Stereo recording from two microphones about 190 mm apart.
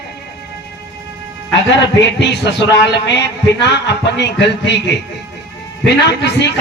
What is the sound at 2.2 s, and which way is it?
A man's voice, 65° left (ahead or behind).